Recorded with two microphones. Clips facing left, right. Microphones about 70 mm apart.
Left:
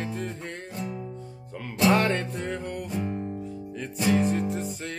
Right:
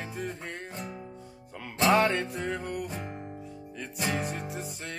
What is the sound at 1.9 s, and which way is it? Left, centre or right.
Music, centre.